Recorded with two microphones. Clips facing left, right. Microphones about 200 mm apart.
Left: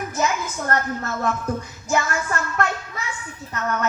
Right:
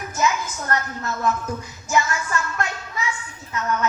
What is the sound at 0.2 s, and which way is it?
A woman's voice, 50° left (ahead or behind).